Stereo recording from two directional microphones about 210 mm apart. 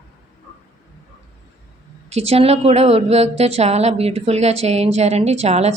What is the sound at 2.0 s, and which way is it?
A woman's voice, 30° right (ahead or behind).